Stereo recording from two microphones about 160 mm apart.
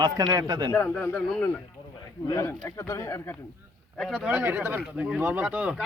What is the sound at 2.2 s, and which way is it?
Speech, 20° left (ahead or behind).